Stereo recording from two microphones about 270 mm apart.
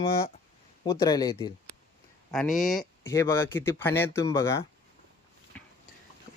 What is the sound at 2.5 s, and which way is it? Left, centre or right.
Speech, centre.